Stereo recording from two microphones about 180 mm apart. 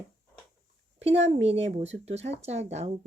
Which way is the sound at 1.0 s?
35° right (ahead or behind).